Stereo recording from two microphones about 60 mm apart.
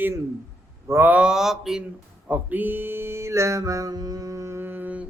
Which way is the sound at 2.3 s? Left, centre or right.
Right.